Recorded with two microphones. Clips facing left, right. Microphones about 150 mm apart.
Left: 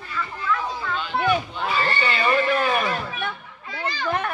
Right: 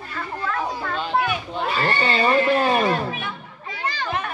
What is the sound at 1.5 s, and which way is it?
Neigh, 35° right (ahead or behind).